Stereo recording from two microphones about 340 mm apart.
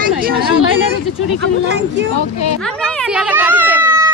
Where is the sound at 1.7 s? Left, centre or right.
Right.